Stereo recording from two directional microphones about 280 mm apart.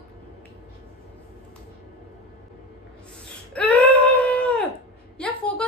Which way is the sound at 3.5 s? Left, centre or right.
Centre.